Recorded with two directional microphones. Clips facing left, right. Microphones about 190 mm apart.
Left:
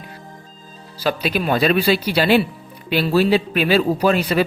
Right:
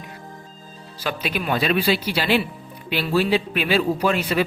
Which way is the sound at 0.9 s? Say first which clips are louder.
Left 5 dB; 35° left (ahead or behind).